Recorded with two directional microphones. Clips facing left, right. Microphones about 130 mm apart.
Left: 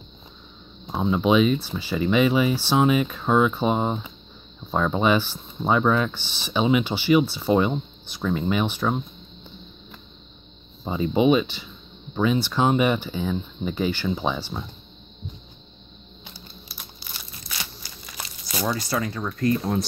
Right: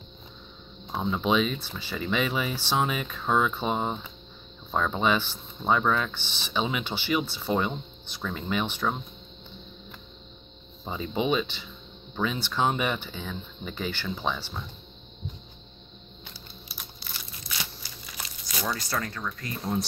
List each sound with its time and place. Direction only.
0.8 s speech: 10° left (ahead or behind)
10.8 s speech: 10° left (ahead or behind)
16.3 s typing: centre (ahead or behind)
18.7 s speech: 5° left (ahead or behind)